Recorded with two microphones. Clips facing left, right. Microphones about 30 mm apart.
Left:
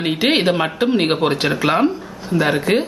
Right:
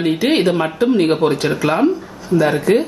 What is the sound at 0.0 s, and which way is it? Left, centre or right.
Speech, left.